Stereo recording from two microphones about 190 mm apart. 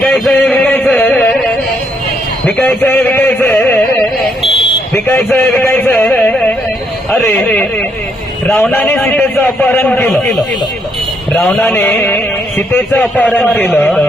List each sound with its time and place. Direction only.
0.0 s a sound: 5° left (ahead or behind)
2.5 s speech: 5° left (ahead or behind)
4.4 s fire alarm: 25° left (ahead or behind)
4.9 s a sound: 10° left (ahead or behind)
7.2 s speech: 10° left (ahead or behind)
11.3 s speech: 5° left (ahead or behind)